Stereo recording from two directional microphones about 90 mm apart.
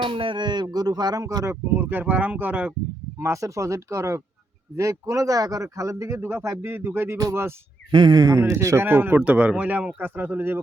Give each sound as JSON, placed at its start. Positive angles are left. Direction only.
{"t": 0.0, "sound": "speech", "side_deg": -75}
{"t": 1.7, "sound": "a man's voice", "side_deg": -20}
{"t": 3.2, "sound": "speech", "side_deg": -35}
{"t": 7.9, "sound": "speech", "side_deg": -55}
{"t": 8.4, "sound": "a man's voice", "side_deg": -35}